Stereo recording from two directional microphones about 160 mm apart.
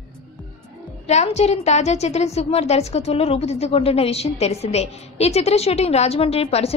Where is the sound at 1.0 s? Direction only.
45° left (ahead or behind).